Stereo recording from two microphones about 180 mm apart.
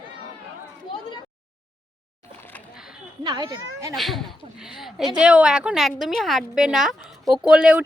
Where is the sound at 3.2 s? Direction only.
20° right (ahead or behind).